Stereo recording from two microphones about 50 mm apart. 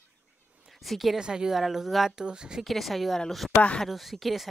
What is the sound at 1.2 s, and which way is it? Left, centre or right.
Speech, centre.